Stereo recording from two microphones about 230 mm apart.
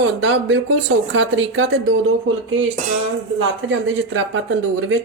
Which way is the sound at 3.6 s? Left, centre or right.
Right.